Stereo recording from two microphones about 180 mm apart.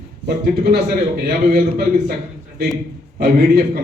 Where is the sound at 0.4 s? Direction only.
60° right (ahead or behind).